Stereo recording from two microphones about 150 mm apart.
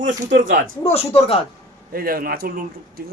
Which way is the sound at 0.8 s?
40° left (ahead or behind).